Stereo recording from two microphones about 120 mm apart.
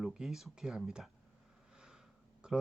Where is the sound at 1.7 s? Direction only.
5° right (ahead or behind).